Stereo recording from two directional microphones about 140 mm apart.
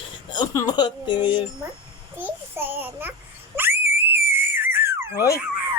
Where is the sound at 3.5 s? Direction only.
15° right (ahead or behind).